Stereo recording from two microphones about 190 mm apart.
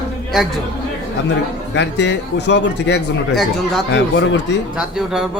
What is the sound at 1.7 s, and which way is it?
Speech, 65° left (ahead or behind).